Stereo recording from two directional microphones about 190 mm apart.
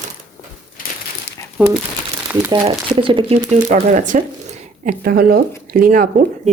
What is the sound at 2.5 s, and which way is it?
Speech, 25° right (ahead or behind).